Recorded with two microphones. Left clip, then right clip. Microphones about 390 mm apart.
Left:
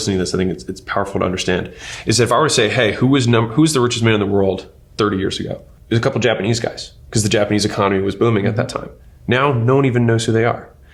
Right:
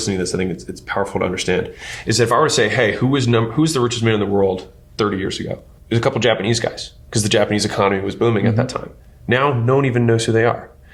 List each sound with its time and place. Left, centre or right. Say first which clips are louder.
0.0 s speech: left 2 dB; left